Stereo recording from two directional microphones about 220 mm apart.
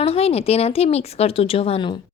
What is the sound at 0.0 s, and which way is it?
Speech, 25° left (ahead or behind).